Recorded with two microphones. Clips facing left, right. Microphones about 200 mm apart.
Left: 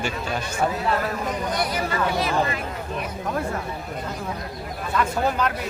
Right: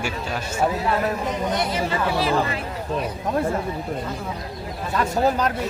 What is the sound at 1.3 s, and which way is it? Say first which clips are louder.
Speech: right 2 dB; 25° right (ahead or behind).